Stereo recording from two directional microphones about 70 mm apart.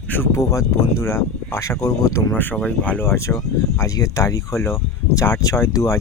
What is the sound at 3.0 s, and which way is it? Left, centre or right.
Speech, left.